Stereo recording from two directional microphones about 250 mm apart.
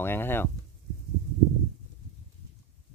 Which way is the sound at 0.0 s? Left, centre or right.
Centre.